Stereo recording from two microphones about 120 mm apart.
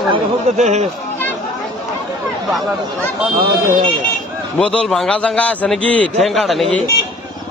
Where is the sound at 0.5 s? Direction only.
70° right (ahead or behind).